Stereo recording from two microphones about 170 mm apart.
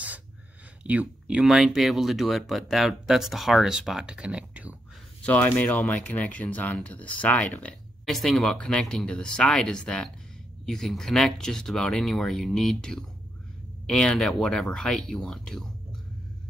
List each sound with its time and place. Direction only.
0.8 s speech: 5° right (ahead or behind)
5.2 s speech: 10° left (ahead or behind)